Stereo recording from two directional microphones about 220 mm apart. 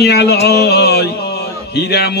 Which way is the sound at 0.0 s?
50° left (ahead or behind).